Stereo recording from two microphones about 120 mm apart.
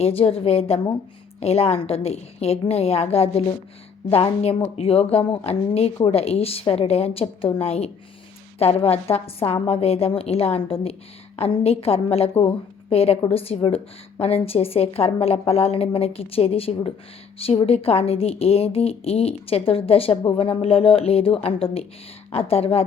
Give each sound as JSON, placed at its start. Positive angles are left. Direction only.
{"t": 0.0, "sound": "a woman's voice", "side_deg": 55}